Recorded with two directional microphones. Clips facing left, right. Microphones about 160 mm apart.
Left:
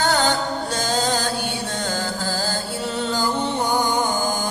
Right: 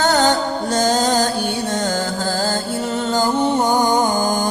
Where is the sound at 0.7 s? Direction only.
45° right (ahead or behind).